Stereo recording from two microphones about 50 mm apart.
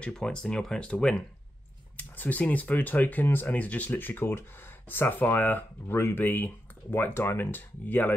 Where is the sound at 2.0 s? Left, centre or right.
Left.